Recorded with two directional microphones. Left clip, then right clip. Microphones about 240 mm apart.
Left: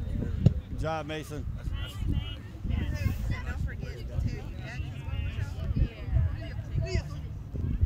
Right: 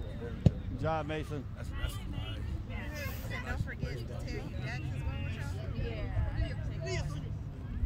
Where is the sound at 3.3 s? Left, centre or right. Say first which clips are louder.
Right 1 dB; right.